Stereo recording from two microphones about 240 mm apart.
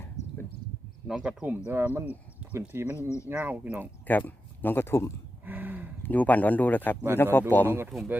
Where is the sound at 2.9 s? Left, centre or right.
Centre.